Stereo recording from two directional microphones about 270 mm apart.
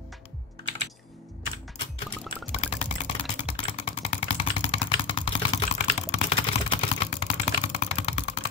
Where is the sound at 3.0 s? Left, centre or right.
Left.